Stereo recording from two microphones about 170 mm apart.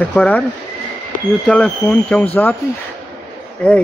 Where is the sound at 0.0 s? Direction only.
10° left (ahead or behind).